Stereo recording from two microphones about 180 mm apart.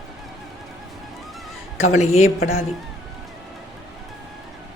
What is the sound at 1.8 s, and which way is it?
Speech, 35° left (ahead or behind).